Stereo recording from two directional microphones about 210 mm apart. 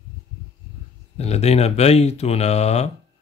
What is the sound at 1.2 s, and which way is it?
Speech, 30° left (ahead or behind).